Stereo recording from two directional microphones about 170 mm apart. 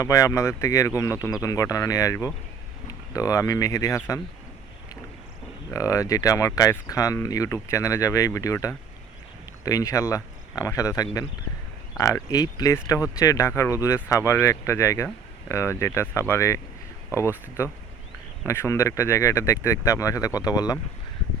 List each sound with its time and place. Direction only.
0.0 s speech: 20° left (ahead or behind)
5.7 s speech: 20° left (ahead or behind)